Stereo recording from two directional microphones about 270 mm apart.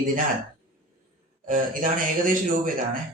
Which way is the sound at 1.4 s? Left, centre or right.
Right.